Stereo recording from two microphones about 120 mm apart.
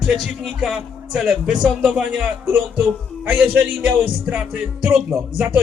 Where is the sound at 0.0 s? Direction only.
5° right (ahead or behind).